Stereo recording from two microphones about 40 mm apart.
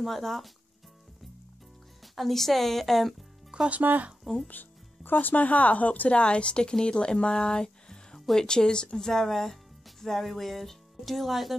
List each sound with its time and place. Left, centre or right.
0.0 s speech: centre
2.1 s speech: centre
3.8 s speech: right
4.2 s speech: centre
4.5 s speech: left; by 11.5 s centre